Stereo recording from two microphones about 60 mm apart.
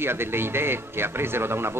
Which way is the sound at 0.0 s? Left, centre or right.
Right.